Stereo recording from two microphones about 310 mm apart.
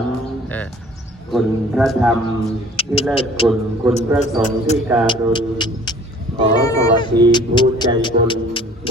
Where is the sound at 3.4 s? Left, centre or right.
Centre.